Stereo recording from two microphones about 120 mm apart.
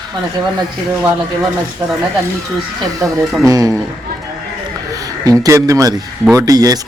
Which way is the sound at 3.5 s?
30° right (ahead or behind).